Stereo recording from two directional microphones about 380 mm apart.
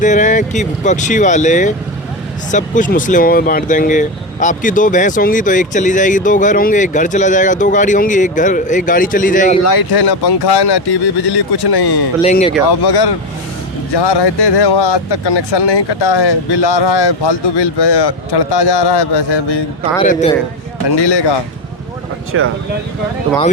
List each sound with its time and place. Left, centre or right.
0.0 s speech: centre
9.6 s speech: left
12.2 s speech: centre
12.8 s speech: left
13.9 s speech: left
20.0 s speech: centre
20.8 s speech: left
22.3 s speech: right